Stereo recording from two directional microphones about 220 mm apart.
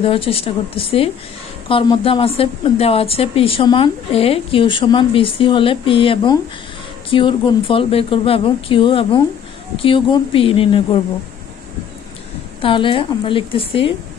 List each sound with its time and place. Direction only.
0.0 s a woman's voice: 25° left (ahead or behind)
12.6 s a woman's voice: 25° left (ahead or behind)